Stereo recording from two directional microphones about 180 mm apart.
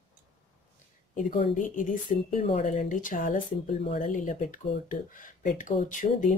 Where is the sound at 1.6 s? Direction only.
45° left (ahead or behind).